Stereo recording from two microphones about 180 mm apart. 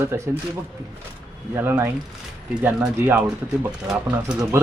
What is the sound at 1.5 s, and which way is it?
A man's voice, 15° right (ahead or behind).